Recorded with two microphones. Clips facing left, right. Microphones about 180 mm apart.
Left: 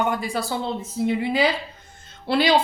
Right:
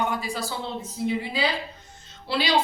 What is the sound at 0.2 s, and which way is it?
Speech, 60° left (ahead or behind).